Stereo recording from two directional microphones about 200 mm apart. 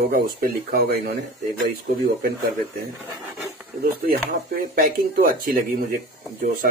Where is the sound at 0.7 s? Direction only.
50° right (ahead or behind).